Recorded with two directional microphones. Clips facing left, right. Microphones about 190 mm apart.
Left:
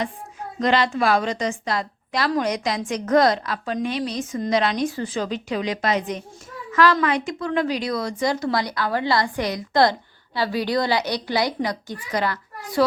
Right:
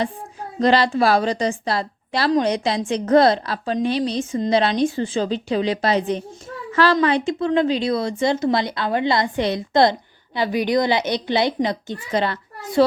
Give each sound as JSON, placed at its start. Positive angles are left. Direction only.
{"t": 0.6, "sound": "a woman's voice", "side_deg": -35}